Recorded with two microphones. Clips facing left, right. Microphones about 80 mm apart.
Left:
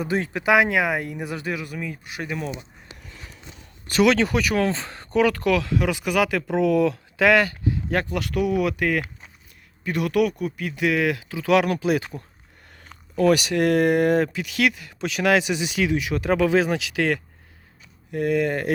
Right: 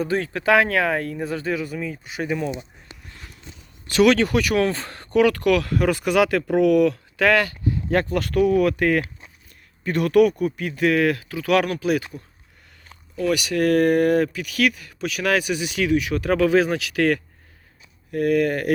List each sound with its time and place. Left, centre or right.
0.0 s speech: centre
3.9 s speech: left
5.7 s speech: centre
7.9 s speech: centre; by 12.0 s left
13.3 s speech: left